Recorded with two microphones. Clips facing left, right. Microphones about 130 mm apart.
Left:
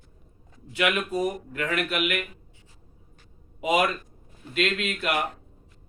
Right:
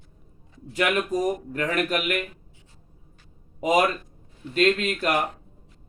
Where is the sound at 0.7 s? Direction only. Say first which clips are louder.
Right 2 dB; 40° right (ahead or behind).